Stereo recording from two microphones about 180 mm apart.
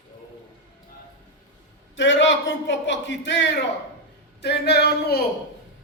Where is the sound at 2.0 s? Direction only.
90° left.